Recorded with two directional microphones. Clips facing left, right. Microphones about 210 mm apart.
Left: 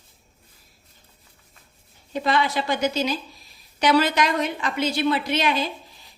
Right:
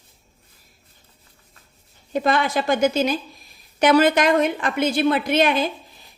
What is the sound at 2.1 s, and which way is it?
A woman's voice, 50° right (ahead or behind).